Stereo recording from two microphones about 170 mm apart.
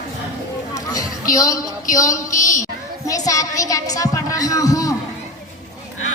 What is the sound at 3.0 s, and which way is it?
A woman's voice, 20° left (ahead or behind).